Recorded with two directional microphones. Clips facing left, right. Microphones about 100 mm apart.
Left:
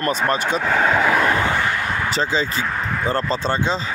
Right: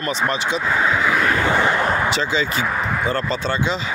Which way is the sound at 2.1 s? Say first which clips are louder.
Even; 35° left (ahead or behind).